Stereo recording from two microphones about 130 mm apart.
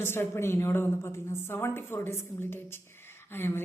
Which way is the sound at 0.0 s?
15° left (ahead or behind).